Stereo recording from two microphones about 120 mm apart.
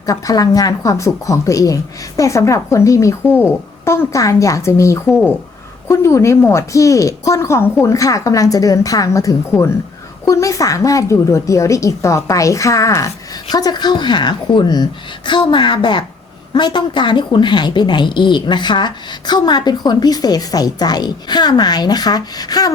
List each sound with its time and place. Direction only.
0.0 s a woman's voice: 30° left (ahead or behind)